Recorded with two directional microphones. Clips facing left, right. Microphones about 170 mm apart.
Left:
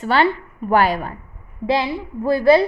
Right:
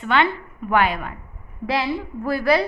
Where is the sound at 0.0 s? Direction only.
35° left (ahead or behind).